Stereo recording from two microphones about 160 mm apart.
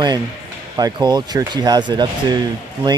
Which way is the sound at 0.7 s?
25° right (ahead or behind).